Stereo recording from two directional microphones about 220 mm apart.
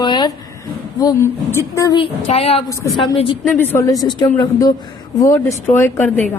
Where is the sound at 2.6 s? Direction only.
15° left (ahead or behind).